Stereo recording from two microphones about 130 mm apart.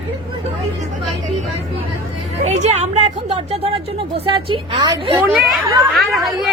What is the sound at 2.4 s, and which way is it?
A woman's voice, 65° right (ahead or behind).